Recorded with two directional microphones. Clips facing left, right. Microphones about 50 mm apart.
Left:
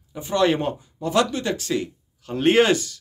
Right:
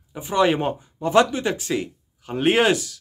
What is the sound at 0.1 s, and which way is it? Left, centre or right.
Speech, centre.